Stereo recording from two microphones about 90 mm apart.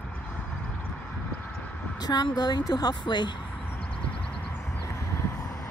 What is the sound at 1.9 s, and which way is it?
A woman's voice, 50° left (ahead or behind).